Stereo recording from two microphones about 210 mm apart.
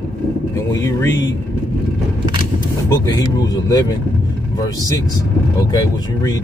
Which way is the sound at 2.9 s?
15° left (ahead or behind).